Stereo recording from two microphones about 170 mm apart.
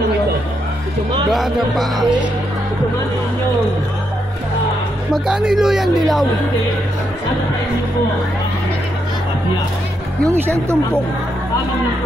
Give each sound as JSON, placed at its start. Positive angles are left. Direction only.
{"t": 1.3, "sound": "speech", "side_deg": 0}
{"t": 5.1, "sound": "speech", "side_deg": -5}
{"t": 10.2, "sound": "speech", "side_deg": -15}